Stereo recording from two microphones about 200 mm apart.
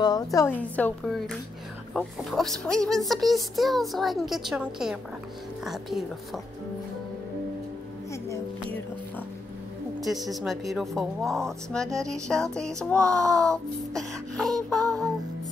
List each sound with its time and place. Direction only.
0.0 s speech: 20° left (ahead or behind); by 6.4 s centre (ahead or behind)
9.9 s speech: centre (ahead or behind)
14.8 s music: 15° right (ahead or behind)